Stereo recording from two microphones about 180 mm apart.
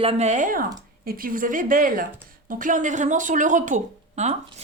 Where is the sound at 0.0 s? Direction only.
35° right (ahead or behind).